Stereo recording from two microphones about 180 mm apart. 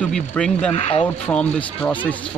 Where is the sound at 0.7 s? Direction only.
35° left (ahead or behind).